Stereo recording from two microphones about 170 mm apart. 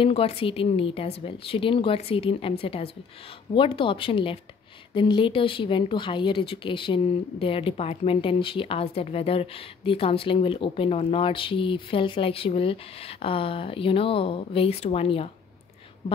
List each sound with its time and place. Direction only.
0.0 s speech: 35° left (ahead or behind)